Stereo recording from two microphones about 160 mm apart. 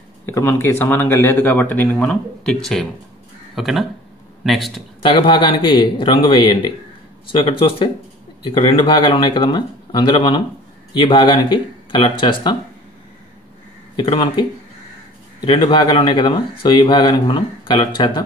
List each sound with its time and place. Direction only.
0.3 s a man's voice: 15° left (ahead or behind)
5.0 s speech: 30° left (ahead or behind)
13.9 s speech: 30° left (ahead or behind)
15.4 s speech: 30° left (ahead or behind)